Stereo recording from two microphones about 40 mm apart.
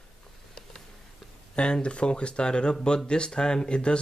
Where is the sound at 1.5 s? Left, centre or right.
Left.